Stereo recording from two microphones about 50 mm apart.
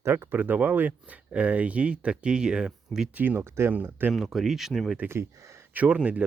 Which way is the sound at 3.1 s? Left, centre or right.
Right.